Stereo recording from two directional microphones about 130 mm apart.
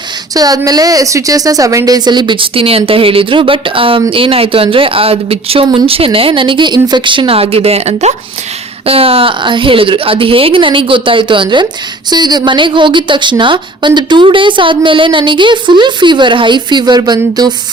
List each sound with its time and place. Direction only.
0.3 s a woman's voice: 30° right (ahead or behind)